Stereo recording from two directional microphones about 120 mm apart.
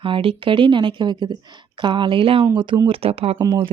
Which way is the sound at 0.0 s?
45° right (ahead or behind).